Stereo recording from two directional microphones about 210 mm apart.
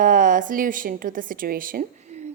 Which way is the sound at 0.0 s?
40° right (ahead or behind).